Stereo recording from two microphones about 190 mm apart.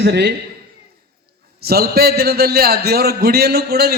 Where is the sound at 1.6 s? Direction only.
55° right (ahead or behind).